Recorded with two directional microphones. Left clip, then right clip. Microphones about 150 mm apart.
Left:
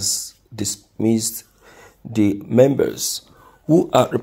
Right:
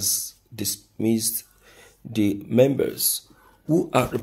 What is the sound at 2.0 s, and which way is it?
Speech, 15° left (ahead or behind).